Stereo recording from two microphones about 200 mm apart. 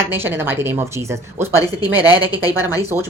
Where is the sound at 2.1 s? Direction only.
20° left (ahead or behind).